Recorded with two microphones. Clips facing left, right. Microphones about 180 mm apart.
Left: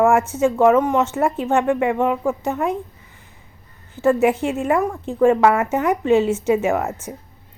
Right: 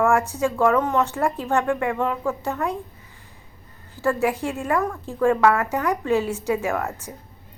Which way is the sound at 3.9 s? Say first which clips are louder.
Left 6 dB; 20° left (ahead or behind).